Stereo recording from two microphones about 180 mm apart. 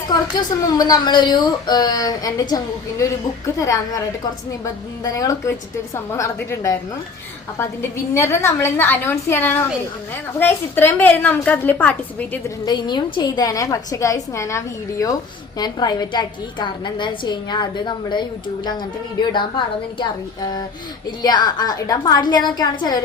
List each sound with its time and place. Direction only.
0.7 s a woman's voice: 20° left (ahead or behind)
12.6 s a woman's voice: 25° left (ahead or behind)